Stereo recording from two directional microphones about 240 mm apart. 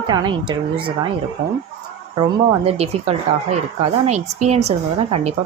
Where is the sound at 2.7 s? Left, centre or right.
Right.